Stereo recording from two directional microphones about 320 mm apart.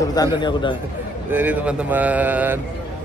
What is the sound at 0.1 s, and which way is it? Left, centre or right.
Speech, centre.